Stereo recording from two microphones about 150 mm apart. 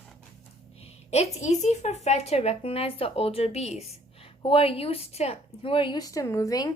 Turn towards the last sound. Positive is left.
turn(degrees=25)  # may be behind; listen again after turning